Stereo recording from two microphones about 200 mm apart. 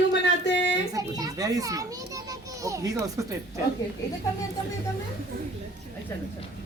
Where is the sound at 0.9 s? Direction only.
20° right (ahead or behind).